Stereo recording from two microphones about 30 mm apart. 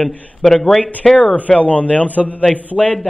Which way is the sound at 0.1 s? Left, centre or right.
Left.